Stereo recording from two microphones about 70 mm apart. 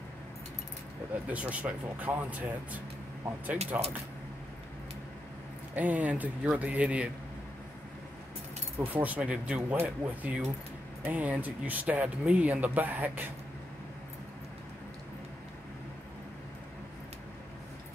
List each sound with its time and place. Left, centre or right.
1.3 s speech: centre
5.8 s speech: right
8.7 s speech: right